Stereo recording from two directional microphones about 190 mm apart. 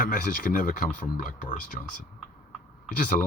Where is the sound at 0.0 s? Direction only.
45° left (ahead or behind).